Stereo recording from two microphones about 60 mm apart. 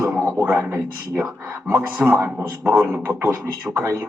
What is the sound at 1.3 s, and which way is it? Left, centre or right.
Music, right.